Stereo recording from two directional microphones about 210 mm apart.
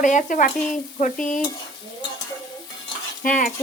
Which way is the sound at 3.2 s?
40° left (ahead or behind).